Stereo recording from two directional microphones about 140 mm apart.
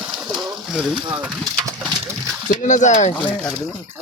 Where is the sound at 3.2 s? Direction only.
10° left (ahead or behind).